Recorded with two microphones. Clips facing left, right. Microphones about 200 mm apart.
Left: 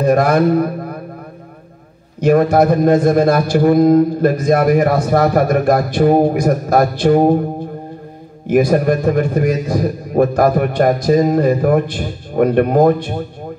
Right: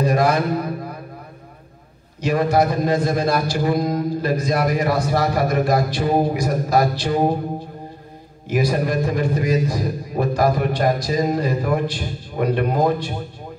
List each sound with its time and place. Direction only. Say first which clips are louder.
0.0 s speech: left 6 dB; 55° left (ahead or behind)
2.1 s a man's voice: left 6 dB; 55° left (ahead or behind)
8.5 s a man's voice: left 8 dB; 55° left (ahead or behind)